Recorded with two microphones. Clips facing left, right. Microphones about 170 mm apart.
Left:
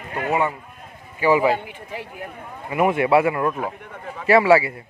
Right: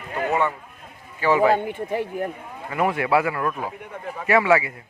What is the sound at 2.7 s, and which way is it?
A man's voice, 15° left (ahead or behind).